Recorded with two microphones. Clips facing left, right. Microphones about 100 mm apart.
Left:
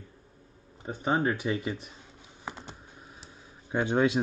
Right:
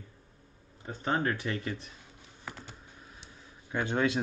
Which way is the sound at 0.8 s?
15° left (ahead or behind).